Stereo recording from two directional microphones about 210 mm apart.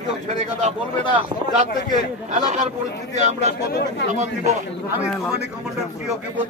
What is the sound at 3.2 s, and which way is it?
Speech, 35° right (ahead or behind).